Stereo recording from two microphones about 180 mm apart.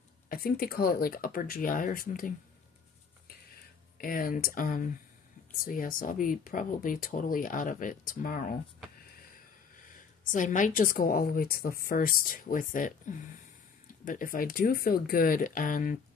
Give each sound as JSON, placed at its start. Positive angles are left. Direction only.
{"t": 0.3, "sound": "speech", "side_deg": 55}
{"t": 4.0, "sound": "speech", "side_deg": 50}
{"t": 10.3, "sound": "speech", "side_deg": 45}